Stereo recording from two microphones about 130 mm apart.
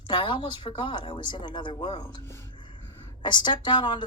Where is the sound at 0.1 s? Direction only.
35° left (ahead or behind).